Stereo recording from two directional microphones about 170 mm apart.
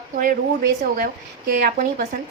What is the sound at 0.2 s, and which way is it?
A woman's voice, 55° right (ahead or behind).